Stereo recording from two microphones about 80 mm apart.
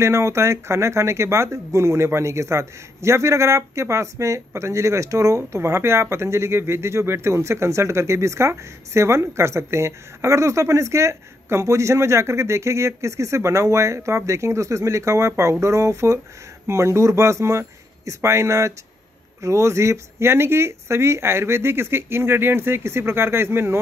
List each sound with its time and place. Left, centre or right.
0.0 s speech: right